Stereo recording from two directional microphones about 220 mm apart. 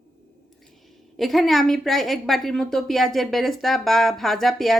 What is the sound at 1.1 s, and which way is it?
A woman's voice, centre (ahead or behind).